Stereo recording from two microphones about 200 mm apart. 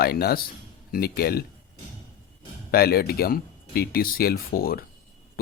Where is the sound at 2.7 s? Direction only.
50° left (ahead or behind).